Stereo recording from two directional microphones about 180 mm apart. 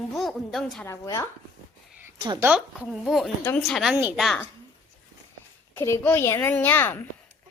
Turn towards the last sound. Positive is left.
turn(degrees=10)  # may be behind; listen again after turning